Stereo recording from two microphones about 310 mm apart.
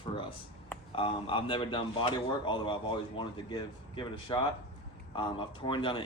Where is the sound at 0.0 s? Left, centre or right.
Centre.